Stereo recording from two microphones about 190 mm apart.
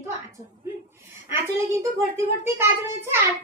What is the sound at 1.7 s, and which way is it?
A child's voice, 15° right (ahead or behind).